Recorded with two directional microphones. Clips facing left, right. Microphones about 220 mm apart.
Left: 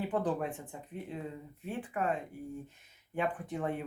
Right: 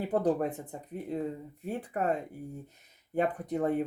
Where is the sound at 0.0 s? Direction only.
40° right (ahead or behind).